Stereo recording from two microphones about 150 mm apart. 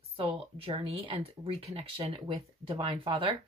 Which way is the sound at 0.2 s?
40° right (ahead or behind).